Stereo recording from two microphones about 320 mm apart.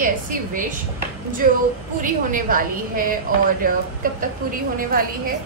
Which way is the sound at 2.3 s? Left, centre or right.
Right.